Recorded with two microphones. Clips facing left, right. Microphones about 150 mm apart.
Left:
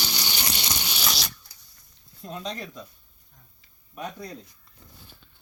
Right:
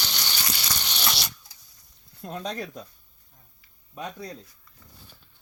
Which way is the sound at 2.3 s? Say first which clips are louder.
Right 2 dB; 50° right (ahead or behind).